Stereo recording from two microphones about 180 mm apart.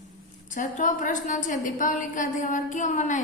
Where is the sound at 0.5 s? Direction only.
45° left (ahead or behind).